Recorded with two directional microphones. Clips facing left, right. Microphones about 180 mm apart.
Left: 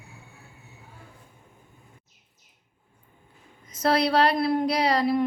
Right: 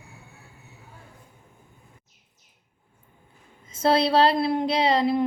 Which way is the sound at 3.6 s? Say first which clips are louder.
Right 2 dB; 25° right (ahead or behind).